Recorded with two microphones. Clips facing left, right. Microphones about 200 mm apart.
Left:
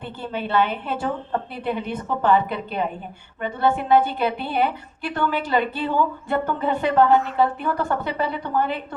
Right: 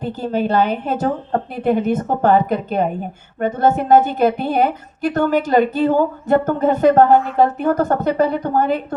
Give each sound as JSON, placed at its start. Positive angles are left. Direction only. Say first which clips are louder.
{"t": 0.0, "sound": "a woman's voice", "louder": "right 9 dB", "side_deg": -40}